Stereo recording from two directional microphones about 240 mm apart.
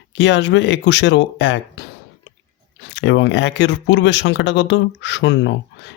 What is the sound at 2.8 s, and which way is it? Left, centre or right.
Speech, left.